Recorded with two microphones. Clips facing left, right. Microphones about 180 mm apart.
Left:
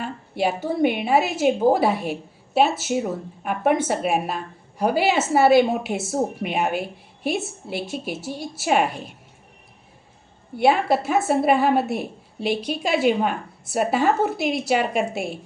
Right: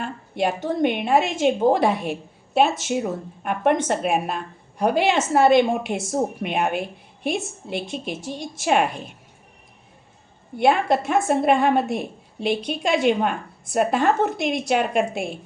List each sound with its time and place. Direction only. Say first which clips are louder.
0.0 s a woman's voice: even; 5° left (ahead or behind)
10.6 s a woman's voice: even; 5° left (ahead or behind)